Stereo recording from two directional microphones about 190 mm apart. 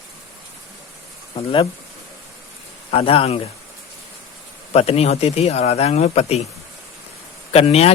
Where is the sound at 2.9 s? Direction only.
30° left (ahead or behind).